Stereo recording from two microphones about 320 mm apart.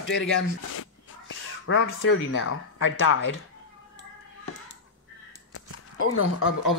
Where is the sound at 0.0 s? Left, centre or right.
Left.